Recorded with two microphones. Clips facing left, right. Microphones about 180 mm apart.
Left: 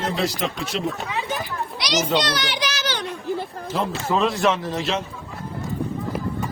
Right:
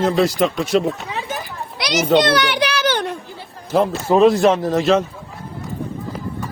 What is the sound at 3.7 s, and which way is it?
Speech, 60° right (ahead or behind).